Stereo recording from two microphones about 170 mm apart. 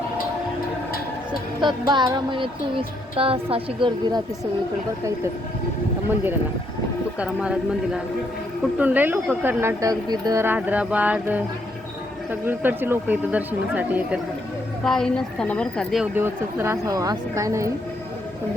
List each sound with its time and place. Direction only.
1.6 s child singing: 25° right (ahead or behind)
7.2 s a woman's voice: 5° right (ahead or behind)
14.8 s a woman's voice: 5° left (ahead or behind)
16.1 s speech: 15° right (ahead or behind)